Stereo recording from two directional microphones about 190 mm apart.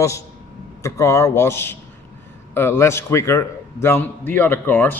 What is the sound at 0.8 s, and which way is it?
A man's voice, 15° left (ahead or behind).